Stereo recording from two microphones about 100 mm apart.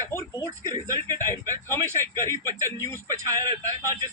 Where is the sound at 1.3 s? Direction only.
25° left (ahead or behind).